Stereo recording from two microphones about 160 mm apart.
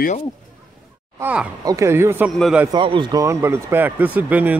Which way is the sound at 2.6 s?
30° right (ahead or behind).